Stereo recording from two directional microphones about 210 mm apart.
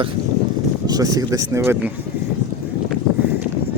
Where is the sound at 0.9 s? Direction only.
15° right (ahead or behind).